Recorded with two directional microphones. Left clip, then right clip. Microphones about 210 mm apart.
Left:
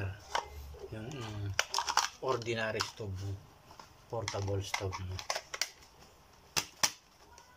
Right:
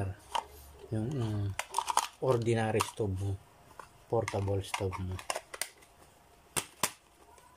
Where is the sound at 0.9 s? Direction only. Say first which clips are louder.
Right 9 dB; 25° right (ahead or behind).